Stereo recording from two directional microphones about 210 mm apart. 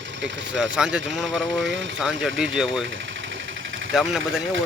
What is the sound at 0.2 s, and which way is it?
Speech, 60° right (ahead or behind).